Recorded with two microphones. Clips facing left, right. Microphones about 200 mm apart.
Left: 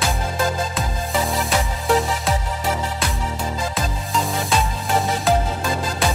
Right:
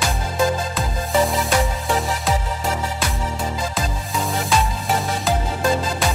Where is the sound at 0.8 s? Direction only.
Centre (ahead or behind).